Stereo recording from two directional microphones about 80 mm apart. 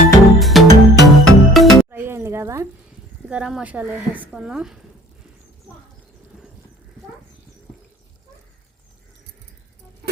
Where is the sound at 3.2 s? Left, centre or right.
Centre.